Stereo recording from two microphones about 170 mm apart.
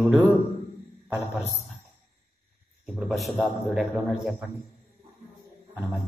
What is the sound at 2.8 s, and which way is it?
A man's voice, centre (ahead or behind).